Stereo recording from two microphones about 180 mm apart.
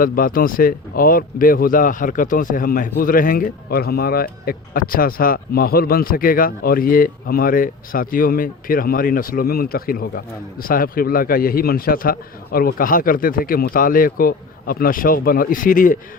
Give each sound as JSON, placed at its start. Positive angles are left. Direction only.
{"t": 0.0, "sound": "speech", "side_deg": 50}